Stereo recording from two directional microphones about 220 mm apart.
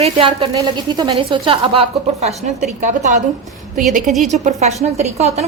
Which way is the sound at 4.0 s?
Centre (ahead or behind).